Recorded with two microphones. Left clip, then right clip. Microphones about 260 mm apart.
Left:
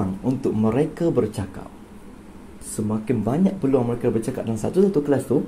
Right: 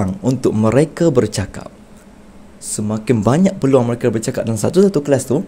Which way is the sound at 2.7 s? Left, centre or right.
Right.